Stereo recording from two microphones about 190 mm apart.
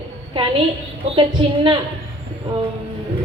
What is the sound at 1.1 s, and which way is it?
Speech, 25° right (ahead or behind).